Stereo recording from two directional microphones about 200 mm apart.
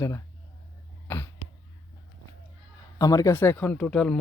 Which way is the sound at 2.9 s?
15° left (ahead or behind).